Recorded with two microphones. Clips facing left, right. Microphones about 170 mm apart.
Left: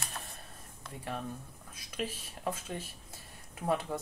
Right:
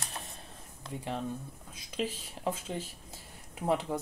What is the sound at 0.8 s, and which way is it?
Speech, 25° right (ahead or behind).